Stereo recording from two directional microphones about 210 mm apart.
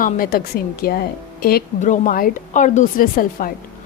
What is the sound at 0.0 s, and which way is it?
A woman's voice, 45° left (ahead or behind).